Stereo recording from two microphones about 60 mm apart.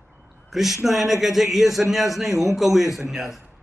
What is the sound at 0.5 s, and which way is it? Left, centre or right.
A man's voice, centre.